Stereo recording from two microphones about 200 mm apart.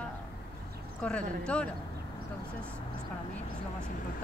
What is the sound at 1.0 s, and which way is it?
Speech, 5° left (ahead or behind).